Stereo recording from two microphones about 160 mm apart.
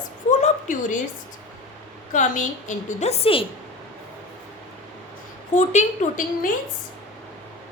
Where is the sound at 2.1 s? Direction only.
50° left (ahead or behind).